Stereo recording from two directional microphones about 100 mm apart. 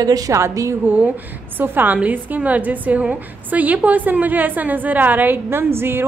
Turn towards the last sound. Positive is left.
turn(degrees=-25)  # may be behind; listen again after turning